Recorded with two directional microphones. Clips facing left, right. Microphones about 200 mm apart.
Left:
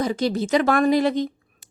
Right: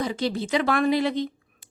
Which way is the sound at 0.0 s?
45° left (ahead or behind).